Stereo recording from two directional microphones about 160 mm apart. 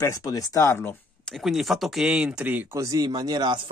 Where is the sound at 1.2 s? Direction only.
Centre (ahead or behind).